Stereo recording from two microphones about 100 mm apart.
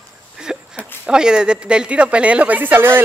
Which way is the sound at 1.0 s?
10° right (ahead or behind).